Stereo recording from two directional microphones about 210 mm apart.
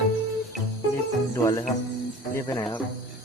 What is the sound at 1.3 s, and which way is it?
Speech, 15° left (ahead or behind).